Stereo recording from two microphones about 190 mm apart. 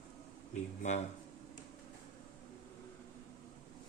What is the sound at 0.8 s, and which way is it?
Speech, 40° left (ahead or behind).